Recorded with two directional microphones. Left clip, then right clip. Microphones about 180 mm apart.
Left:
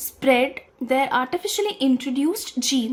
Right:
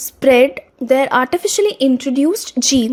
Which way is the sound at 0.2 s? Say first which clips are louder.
Right 8 dB; 35° right (ahead or behind).